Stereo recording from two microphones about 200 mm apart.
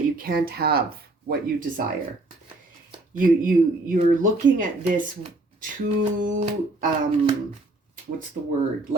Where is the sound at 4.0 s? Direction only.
40° right (ahead or behind).